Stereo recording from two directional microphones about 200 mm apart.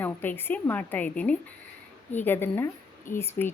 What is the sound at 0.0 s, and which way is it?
A woman's voice, 10° left (ahead or behind).